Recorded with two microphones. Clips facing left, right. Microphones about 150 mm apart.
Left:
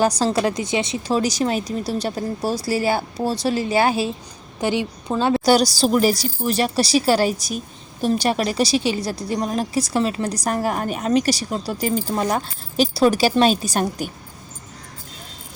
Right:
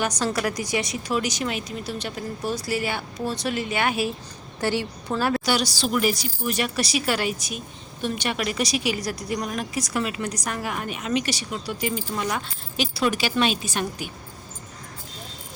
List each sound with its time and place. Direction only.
0.0 s speech: 30° left (ahead or behind)
4.6 s a woman's voice: 15° left (ahead or behind)
5.5 s speech: 40° left (ahead or behind)